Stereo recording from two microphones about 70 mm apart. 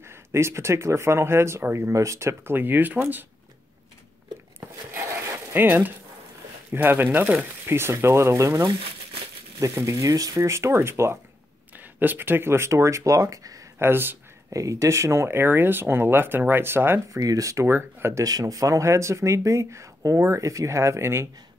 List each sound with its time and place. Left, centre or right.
0.1 s speech: right
2.5 s speech: right
4.6 s a sound: right
5.6 s speech: right
10.4 s speech: right
13.7 s speech: right
14.5 s speech: right
17.1 s speech: right
17.6 s speech: right
18.2 s speech: right